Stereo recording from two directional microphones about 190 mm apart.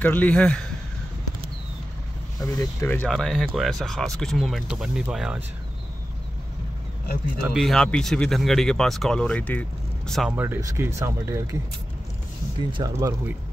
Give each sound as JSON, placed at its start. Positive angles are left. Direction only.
{"t": 0.0, "sound": "speech", "side_deg": 10}
{"t": 2.4, "sound": "speech", "side_deg": 15}
{"t": 7.5, "sound": "speech", "side_deg": 0}
{"t": 10.3, "sound": "speech", "side_deg": -10}
{"t": 12.5, "sound": "speech", "side_deg": -20}